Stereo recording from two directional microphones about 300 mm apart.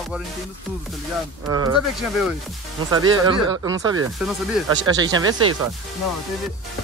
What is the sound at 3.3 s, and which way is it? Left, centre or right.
Speech, centre.